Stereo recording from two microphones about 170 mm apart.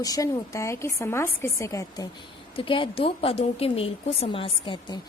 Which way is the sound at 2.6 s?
30° left (ahead or behind).